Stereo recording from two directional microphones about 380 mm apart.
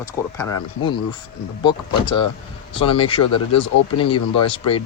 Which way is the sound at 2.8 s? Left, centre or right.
Centre.